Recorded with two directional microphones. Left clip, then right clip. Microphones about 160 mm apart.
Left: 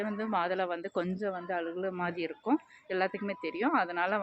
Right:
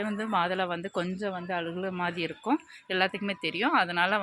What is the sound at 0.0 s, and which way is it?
Speech, 35° right (ahead or behind).